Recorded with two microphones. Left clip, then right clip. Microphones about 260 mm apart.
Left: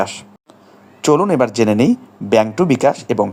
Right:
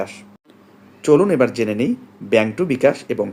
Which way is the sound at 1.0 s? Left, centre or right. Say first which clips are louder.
Left 1 dB; left.